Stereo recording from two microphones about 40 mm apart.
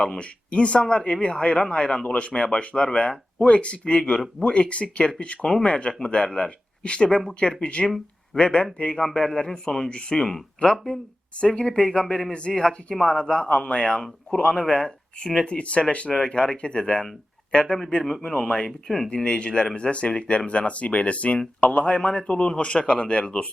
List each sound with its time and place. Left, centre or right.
0.0 s speech: left
7.9 s a sound: centre
8.4 s a man's voice: left
9.9 s speech: left
15.4 s speech: left